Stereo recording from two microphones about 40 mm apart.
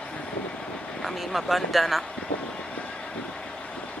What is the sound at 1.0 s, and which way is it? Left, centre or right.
Speech, centre.